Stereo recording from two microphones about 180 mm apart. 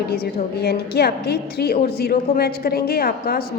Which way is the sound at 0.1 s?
60° left (ahead or behind).